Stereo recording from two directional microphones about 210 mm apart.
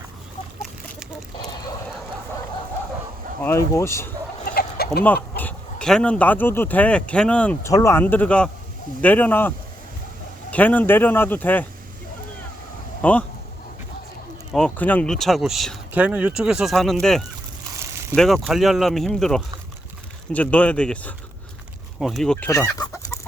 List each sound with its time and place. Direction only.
3.4 s speech: 15° left (ahead or behind)
4.8 s chicken: 45° left (ahead or behind)
5.4 s speech: 5° left (ahead or behind)
10.5 s speech: 10° left (ahead or behind)
13.0 s speech: 5° left (ahead or behind)
14.5 s speech: 5° left (ahead or behind)
22.4 s chicken: 15° left (ahead or behind)